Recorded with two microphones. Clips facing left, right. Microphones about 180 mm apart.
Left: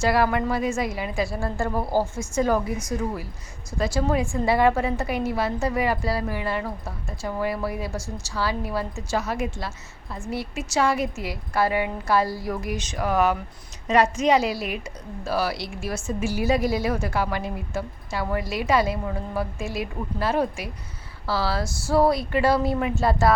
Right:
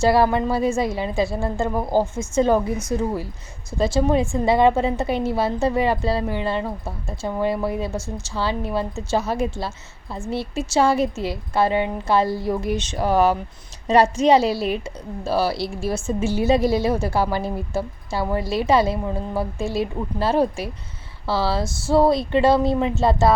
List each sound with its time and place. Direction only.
0.0 s a woman's voice: 30° right (ahead or behind)